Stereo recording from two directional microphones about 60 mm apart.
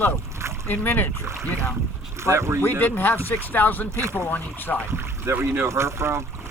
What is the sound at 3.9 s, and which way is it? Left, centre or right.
Speech, right.